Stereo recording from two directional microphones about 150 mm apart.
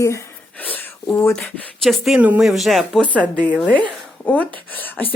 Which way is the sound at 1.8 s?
Centre (ahead or behind).